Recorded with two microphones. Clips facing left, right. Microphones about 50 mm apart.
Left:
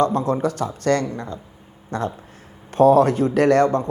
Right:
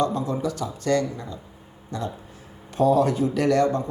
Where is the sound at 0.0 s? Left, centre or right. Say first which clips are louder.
Left 5 dB; left.